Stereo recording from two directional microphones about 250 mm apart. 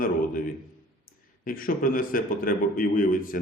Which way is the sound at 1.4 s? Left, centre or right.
Left.